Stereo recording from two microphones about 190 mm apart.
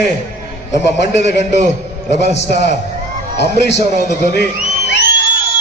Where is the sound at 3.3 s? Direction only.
65° left (ahead or behind).